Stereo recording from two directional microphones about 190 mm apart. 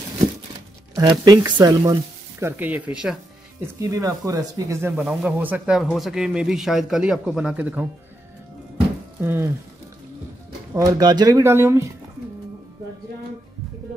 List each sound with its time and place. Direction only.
1.2 s speech: 20° right (ahead or behind); by 3.2 s 5° right (ahead or behind)
3.6 s speech: 15° right (ahead or behind)
9.2 s speech: 10° right (ahead or behind)
10.7 s speech: 20° right (ahead or behind)